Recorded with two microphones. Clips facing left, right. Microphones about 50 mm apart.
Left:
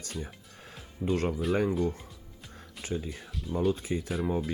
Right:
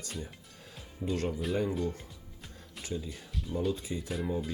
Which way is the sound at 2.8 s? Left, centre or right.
Left.